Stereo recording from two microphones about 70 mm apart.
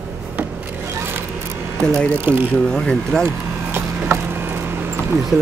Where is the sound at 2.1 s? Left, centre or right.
Right.